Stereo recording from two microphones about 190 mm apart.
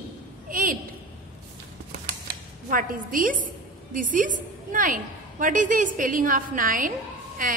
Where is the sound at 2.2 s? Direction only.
45° right (ahead or behind).